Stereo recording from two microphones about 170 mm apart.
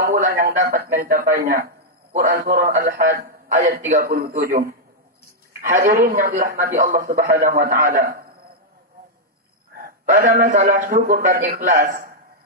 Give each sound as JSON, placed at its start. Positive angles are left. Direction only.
{"t": 0.0, "sound": "a man's voice", "side_deg": -60}
{"t": 9.8, "sound": "a man's voice", "side_deg": -55}